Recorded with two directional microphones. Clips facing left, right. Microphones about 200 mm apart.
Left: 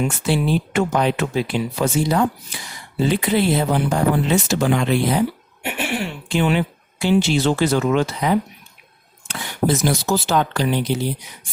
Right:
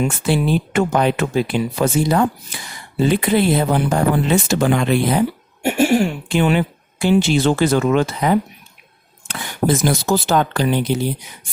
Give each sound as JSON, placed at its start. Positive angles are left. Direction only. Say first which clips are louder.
{"t": 0.3, "sound": "speech", "louder": "right 1 dB", "side_deg": -55}